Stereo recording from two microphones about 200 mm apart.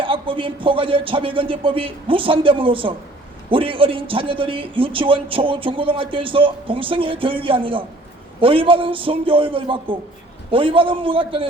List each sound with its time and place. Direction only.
0.0 s a man's voice: 25° right (ahead or behind)